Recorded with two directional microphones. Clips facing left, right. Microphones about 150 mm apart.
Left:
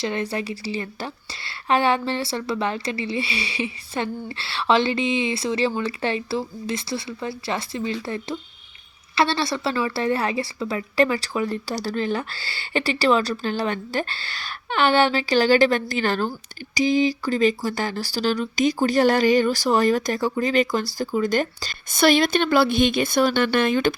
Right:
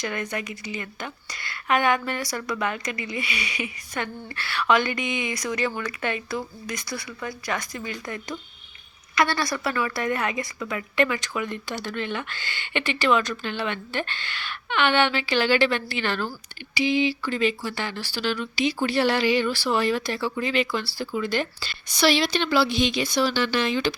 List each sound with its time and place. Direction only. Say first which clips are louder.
0.0 s a woman's voice: left 4 dB; 30° left (ahead or behind); by 23.9 s 50° left (ahead or behind)